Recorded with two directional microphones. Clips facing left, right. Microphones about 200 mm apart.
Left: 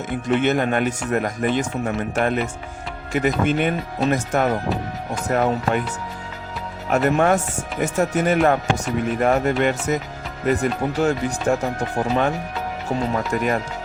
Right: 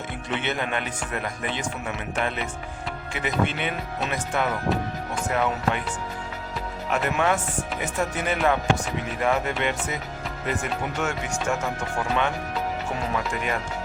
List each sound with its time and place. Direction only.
0.3 s speech: 45° left (ahead or behind)
6.9 s speech: 45° left (ahead or behind)